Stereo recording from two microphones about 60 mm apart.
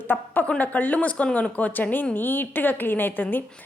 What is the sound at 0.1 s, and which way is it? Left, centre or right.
A woman's voice, left.